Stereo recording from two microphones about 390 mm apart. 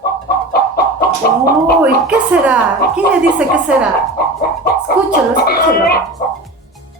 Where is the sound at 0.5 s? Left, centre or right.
Left.